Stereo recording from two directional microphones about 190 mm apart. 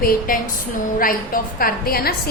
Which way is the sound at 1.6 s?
50° left (ahead or behind).